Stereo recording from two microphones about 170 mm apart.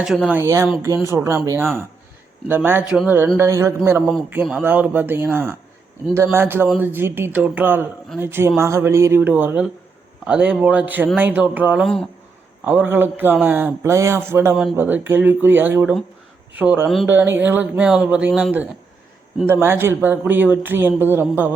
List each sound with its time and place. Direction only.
0.0 s speech: centre (ahead or behind)
0.3 s speech: 15° right (ahead or behind)